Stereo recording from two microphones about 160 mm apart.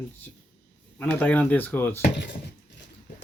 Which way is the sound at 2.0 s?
90° left.